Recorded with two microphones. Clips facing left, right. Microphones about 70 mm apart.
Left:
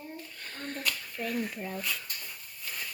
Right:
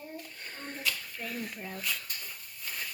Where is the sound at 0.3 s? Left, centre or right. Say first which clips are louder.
Left 2 dB; centre.